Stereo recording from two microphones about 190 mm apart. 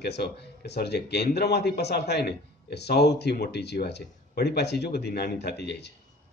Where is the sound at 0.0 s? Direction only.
60° left (ahead or behind).